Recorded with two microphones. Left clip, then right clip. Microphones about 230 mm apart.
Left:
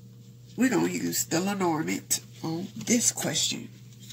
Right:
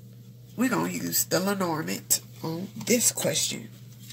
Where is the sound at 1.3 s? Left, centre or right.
Right.